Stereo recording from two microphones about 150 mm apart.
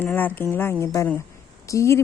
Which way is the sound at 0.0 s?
15° left (ahead or behind).